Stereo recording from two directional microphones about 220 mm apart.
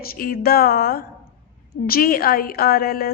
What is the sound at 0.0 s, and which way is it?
A woman's voice, 40° left (ahead or behind).